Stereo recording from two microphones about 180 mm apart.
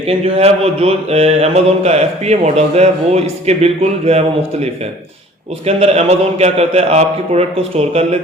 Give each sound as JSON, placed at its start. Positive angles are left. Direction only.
{"t": 0.1, "sound": "speech", "side_deg": -35}
{"t": 5.6, "sound": "speech", "side_deg": -35}